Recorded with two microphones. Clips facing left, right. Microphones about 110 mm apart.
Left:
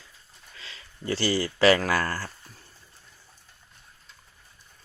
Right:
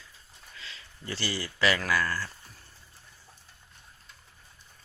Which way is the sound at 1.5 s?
40° left (ahead or behind).